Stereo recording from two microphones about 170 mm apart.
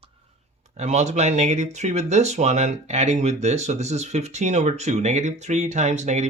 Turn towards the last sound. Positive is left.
turn(degrees=-45)  # may be behind; listen again after turning